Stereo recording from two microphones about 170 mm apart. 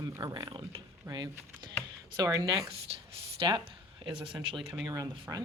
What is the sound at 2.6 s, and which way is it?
Speech, 35° right (ahead or behind).